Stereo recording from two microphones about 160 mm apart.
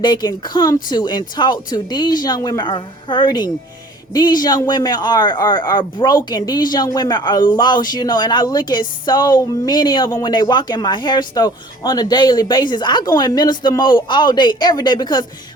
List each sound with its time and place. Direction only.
0.0 s a man's voice: 25° left (ahead or behind)